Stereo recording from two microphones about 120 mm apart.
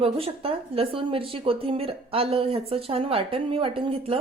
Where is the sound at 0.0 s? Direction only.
50° right (ahead or behind).